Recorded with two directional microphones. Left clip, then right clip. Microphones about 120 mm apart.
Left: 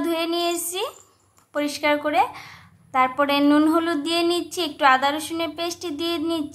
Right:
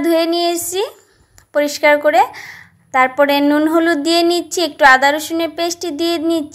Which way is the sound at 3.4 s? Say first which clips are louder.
Right 4 dB; 15° right (ahead or behind).